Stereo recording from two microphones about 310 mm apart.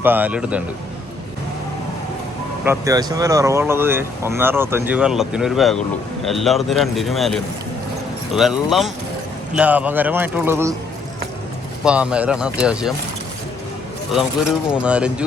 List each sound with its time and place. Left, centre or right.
0.0 s speech: centre
2.6 s speech: centre
11.9 s speech: centre
14.7 s speech: centre